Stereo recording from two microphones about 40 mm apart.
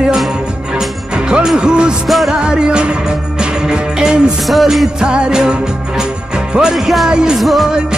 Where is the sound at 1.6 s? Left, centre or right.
Right.